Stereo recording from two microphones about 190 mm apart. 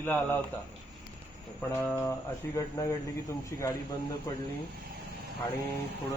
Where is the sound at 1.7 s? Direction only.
15° left (ahead or behind).